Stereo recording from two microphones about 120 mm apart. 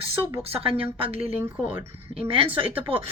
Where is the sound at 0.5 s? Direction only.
50° right (ahead or behind).